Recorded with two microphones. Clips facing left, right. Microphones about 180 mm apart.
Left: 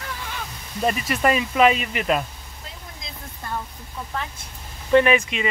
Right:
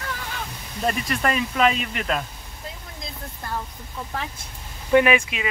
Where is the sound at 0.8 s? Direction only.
5° left (ahead or behind).